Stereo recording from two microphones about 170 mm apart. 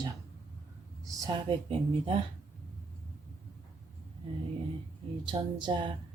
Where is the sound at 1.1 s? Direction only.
20° right (ahead or behind).